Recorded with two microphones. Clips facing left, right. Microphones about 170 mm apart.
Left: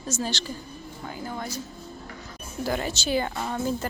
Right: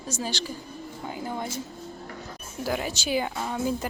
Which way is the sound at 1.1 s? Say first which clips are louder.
Right 1 dB; 20° right (ahead or behind).